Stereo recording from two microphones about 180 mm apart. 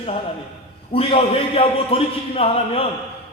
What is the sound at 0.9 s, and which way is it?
A man's voice, 30° left (ahead or behind).